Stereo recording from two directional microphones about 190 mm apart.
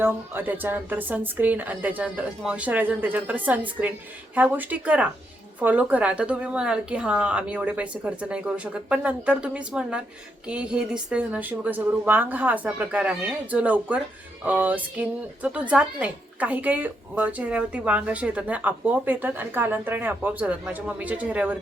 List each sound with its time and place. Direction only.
0.0 s a woman's voice: 10° right (ahead or behind)